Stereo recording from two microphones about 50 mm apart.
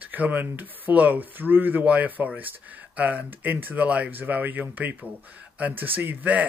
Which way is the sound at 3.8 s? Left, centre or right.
Right.